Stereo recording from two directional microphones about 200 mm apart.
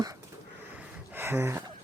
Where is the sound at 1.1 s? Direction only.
10° right (ahead or behind).